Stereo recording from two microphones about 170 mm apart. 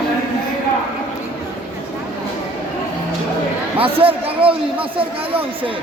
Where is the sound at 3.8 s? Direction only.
35° right (ahead or behind).